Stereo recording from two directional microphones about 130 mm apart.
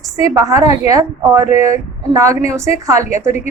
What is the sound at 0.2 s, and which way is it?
Speech, 25° right (ahead or behind).